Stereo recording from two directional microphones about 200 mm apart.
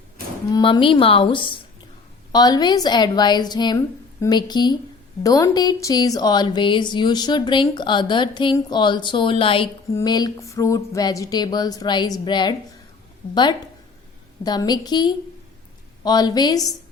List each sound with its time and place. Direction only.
0.5 s speech: 25° left (ahead or behind)